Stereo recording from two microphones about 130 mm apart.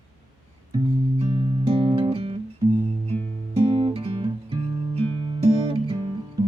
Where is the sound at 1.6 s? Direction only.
45° right (ahead or behind).